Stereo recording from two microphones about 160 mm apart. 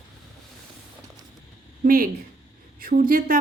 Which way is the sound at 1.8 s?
65° right (ahead or behind).